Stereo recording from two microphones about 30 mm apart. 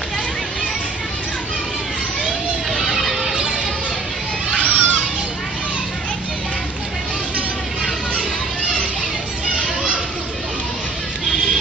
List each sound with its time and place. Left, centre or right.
2.7 s music: centre
4.6 s children playing: right